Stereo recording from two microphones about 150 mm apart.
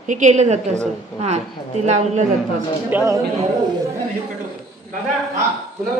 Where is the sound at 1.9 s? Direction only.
50° right (ahead or behind).